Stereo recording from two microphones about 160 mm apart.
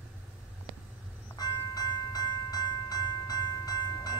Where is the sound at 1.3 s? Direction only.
25° left (ahead or behind).